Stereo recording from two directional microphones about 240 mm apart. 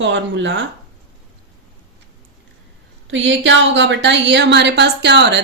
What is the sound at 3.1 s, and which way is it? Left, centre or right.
A woman's voice, right.